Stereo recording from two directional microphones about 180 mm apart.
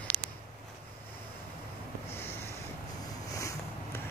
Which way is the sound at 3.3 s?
15° left (ahead or behind).